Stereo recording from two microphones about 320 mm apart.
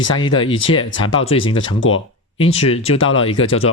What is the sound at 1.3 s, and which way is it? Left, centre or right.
Speech, centre.